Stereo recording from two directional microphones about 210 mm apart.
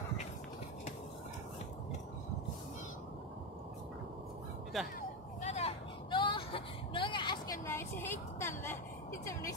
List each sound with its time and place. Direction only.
4.7 s speech: centre (ahead or behind)
5.4 s vehicle: 30° left (ahead or behind)
7.6 s vehicle: 10° left (ahead or behind)